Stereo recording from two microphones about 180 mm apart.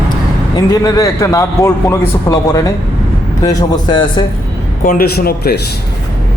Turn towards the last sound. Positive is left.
turn(degrees=60)  # may be behind; listen again after turning